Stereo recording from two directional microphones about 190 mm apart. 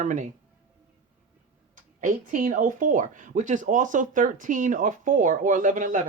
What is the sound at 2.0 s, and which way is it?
Speech, 45° right (ahead or behind).